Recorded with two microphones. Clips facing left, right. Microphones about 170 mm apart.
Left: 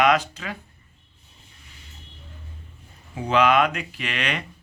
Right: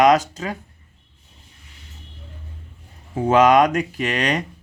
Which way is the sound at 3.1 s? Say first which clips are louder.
Right 5 dB; 45° right (ahead or behind).